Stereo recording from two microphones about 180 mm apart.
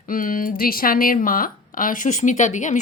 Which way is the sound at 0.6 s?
55° left (ahead or behind).